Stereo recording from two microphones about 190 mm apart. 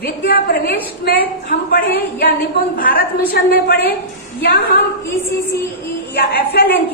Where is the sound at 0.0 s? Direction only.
55° left (ahead or behind).